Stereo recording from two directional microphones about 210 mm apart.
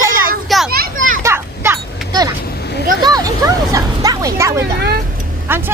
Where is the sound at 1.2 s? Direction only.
10° right (ahead or behind).